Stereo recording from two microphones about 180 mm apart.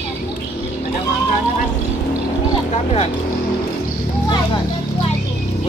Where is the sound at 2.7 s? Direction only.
35° left (ahead or behind).